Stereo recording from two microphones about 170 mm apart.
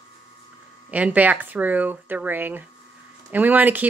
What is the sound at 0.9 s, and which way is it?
Speech, 10° right (ahead or behind).